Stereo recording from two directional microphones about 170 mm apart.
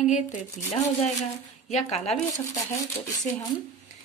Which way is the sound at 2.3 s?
20° left (ahead or behind).